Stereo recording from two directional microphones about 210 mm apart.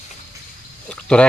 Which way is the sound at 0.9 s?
5° left (ahead or behind).